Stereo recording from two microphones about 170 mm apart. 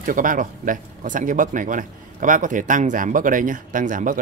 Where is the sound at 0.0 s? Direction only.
50° right (ahead or behind).